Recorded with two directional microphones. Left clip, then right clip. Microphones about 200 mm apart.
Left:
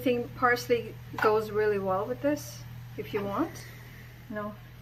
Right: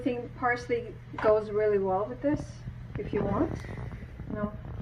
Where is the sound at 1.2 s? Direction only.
25° left (ahead or behind).